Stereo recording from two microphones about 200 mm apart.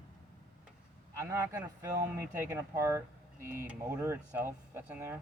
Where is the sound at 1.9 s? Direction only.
10° right (ahead or behind).